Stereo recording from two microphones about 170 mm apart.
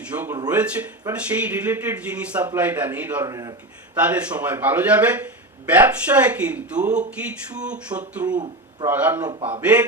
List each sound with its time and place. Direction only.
0.1 s a man's voice: 10° right (ahead or behind)
4.1 s a man's voice: 10° right (ahead or behind)
6.8 s a sound: 45° right (ahead or behind)
7.5 s a man's voice: 5° right (ahead or behind)